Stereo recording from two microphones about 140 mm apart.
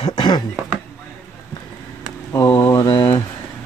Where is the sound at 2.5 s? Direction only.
20° left (ahead or behind).